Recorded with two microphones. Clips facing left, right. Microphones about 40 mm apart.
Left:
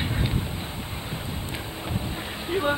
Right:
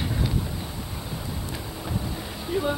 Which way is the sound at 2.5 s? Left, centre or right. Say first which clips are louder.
Left 1 dB; left.